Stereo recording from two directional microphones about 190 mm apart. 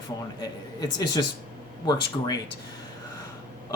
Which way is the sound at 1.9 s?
20° left (ahead or behind).